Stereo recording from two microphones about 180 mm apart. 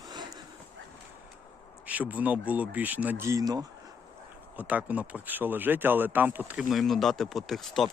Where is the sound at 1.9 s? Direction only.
10° right (ahead or behind).